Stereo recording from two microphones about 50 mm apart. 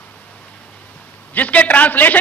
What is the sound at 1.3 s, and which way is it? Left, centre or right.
Speech, left.